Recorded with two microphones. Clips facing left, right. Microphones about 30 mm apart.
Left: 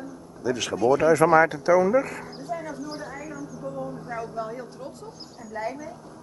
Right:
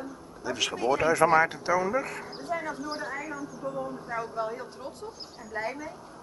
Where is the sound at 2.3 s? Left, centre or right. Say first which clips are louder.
Even; right.